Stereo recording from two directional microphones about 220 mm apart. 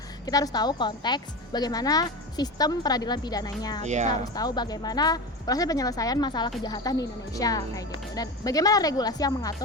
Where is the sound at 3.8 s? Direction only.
30° right (ahead or behind).